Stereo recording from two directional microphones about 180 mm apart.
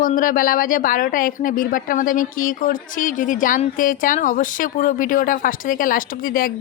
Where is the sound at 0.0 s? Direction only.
50° left (ahead or behind).